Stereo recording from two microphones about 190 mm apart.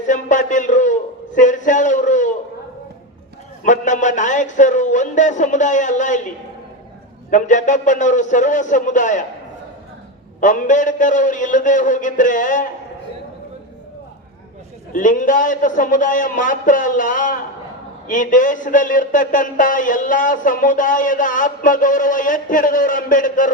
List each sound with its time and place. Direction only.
0.1 s a man's voice: 40° left (ahead or behind)
3.6 s a man's voice: 40° left (ahead or behind)
7.3 s a man's voice: 40° left (ahead or behind)
10.4 s speech: 40° left (ahead or behind)
14.9 s speech: 45° left (ahead or behind)